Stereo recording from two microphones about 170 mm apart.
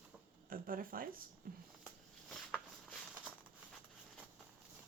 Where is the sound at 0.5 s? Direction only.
55° right (ahead or behind).